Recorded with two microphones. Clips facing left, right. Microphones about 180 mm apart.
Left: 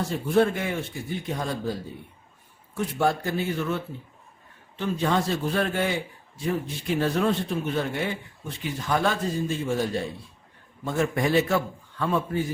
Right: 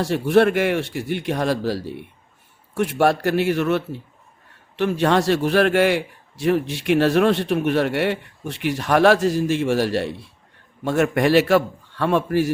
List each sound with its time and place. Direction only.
0.0 s a man's voice: 75° right (ahead or behind)